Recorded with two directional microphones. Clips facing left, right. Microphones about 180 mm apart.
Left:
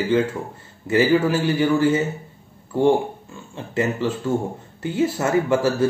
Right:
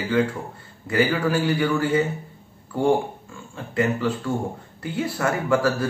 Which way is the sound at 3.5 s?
25° left (ahead or behind).